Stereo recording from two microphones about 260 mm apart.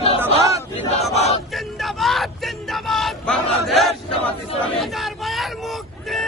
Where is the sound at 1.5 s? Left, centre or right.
Centre.